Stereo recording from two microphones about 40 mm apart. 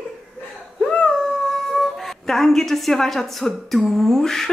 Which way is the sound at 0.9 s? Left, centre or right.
Left.